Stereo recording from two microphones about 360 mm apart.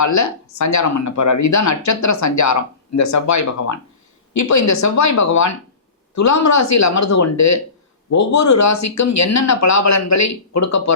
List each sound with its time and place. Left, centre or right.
0.0 s speech: left